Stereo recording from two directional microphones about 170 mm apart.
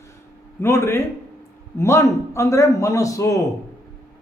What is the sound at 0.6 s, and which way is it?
A man's voice, 15° left (ahead or behind).